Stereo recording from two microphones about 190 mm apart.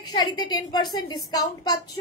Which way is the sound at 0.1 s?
20° left (ahead or behind).